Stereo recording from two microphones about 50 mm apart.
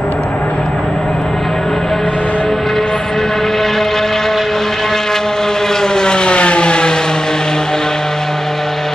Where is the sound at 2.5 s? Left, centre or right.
Centre.